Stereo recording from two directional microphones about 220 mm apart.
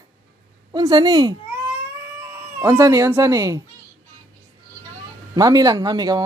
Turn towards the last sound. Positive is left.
turn(degrees=-15)  # may be behind; listen again after turning